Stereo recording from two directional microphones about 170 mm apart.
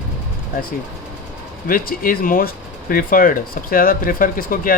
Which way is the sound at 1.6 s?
55° left (ahead or behind).